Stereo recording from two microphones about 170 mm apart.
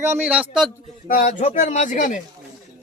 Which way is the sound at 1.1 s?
45° left (ahead or behind).